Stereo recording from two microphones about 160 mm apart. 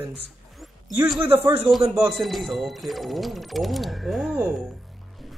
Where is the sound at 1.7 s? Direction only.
Centre (ahead or behind).